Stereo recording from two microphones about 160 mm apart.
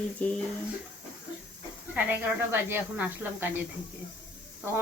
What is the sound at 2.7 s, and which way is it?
Speech, 10° right (ahead or behind).